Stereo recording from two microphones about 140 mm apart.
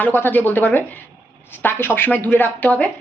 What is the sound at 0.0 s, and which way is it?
Speech, 15° left (ahead or behind).